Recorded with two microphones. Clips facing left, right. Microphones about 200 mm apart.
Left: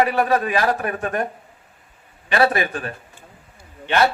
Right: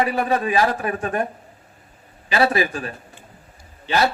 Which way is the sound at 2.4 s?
30° right (ahead or behind).